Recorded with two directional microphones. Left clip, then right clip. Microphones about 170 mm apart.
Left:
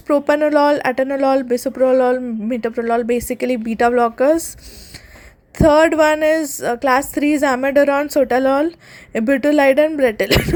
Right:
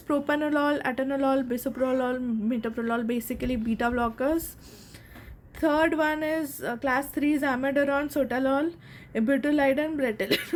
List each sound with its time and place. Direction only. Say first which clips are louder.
0.1 s speech: left 11 dB; 35° left (ahead or behind)
5.5 s a woman's voice: left 12 dB; 45° left (ahead or behind)